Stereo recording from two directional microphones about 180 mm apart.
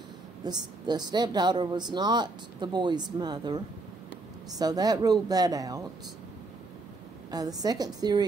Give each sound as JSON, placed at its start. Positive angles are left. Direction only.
{"t": 0.4, "sound": "a woman's voice", "side_deg": -20}
{"t": 7.2, "sound": "a woman's voice", "side_deg": -20}